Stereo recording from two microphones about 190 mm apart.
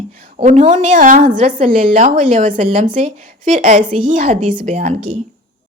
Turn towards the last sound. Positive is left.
turn(degrees=-40)  # may be behind; listen again after turning